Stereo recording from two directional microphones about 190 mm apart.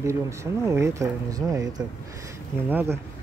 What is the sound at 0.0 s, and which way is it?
Speech, 15° right (ahead or behind).